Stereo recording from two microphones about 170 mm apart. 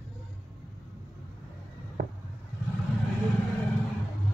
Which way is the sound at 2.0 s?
55° right (ahead or behind).